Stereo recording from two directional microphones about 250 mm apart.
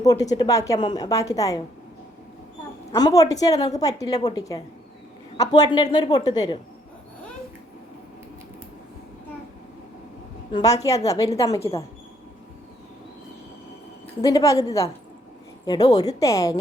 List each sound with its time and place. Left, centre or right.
0.0 s a woman's voice: centre
2.9 s a woman's voice: centre
10.5 s a woman's voice: centre
14.2 s a woman's voice: centre